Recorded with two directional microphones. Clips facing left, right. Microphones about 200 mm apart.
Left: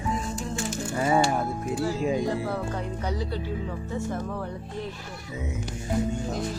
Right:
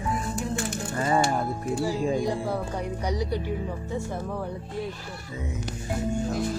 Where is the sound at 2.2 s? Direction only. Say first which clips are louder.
Even; 10° right (ahead or behind).